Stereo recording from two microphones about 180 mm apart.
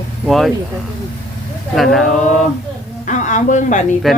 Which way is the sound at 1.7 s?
Centre (ahead or behind).